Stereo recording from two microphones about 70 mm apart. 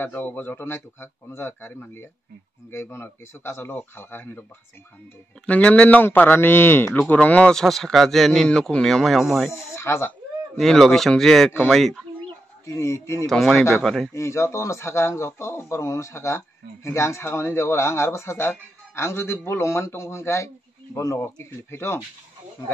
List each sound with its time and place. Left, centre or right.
0.0 s speech: left
2.7 s speech: left
5.5 s speech: centre; by 7.0 s left
7.0 s speech: left
7.5 s speech: centre
9.5 s speech: left
10.6 s speech: centre
12.6 s speech: left
13.3 s speech: centre
14.1 s speech: left
21.2 s speech: left